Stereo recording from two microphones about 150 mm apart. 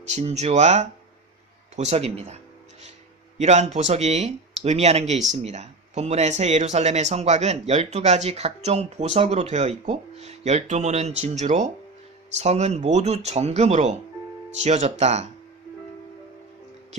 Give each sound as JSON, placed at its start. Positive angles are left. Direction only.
{"t": 0.1, "sound": "speech", "side_deg": -45}